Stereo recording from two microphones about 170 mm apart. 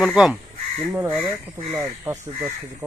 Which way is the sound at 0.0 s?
5° right (ahead or behind).